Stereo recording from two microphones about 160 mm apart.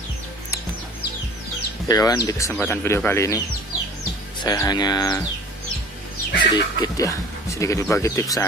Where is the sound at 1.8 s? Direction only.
20° left (ahead or behind).